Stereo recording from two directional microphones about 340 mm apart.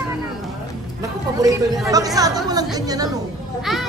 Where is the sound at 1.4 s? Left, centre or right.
Centre.